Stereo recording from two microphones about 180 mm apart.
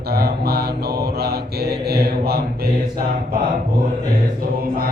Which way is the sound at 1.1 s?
60° right (ahead or behind).